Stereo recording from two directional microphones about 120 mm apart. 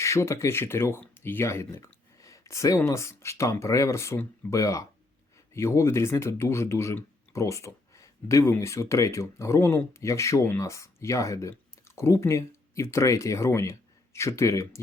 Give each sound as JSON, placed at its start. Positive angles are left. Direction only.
{"t": 0.0, "sound": "speech", "side_deg": 25}